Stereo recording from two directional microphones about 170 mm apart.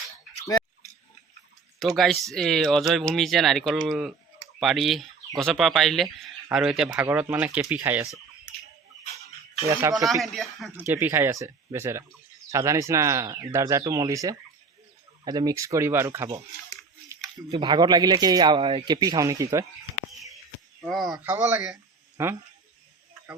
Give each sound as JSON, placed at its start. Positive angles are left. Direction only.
{"t": 2.0, "sound": "speech", "side_deg": 0}
{"t": 6.9, "sound": "speech", "side_deg": -15}
{"t": 9.6, "sound": "speech", "side_deg": -15}
{"t": 10.1, "sound": "speech", "side_deg": 0}
{"t": 11.0, "sound": "speech", "side_deg": -15}
{"t": 17.5, "sound": "a man's voice", "side_deg": -25}
{"t": 20.8, "sound": "speech", "side_deg": 0}
{"t": 21.4, "sound": "a man's voice", "side_deg": -20}